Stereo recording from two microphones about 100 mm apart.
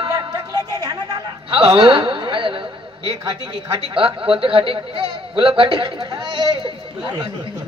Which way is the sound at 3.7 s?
65° right (ahead or behind).